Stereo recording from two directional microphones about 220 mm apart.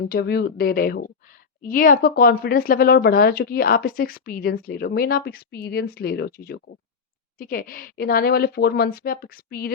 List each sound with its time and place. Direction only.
0.1 s speech: 45° left (ahead or behind)